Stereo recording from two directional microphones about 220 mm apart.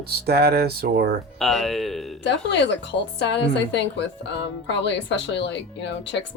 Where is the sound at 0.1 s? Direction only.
45° right (ahead or behind).